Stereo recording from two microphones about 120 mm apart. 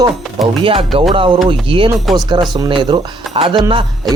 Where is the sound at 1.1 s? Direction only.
45° right (ahead or behind).